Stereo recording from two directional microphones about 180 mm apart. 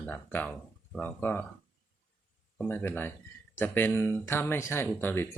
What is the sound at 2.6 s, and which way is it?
Speech, 10° left (ahead or behind).